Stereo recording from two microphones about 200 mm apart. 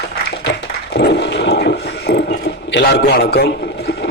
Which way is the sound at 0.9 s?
60° left (ahead or behind).